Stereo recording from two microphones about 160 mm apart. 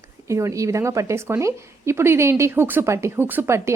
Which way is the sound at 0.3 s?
20° right (ahead or behind).